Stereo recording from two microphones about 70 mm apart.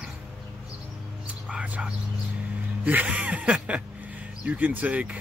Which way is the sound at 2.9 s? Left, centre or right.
Right.